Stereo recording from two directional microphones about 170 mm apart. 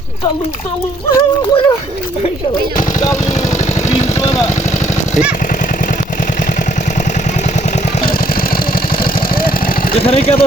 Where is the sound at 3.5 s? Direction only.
45° left (ahead or behind).